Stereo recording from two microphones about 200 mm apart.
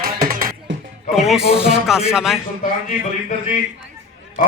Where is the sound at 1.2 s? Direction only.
Centre (ahead or behind).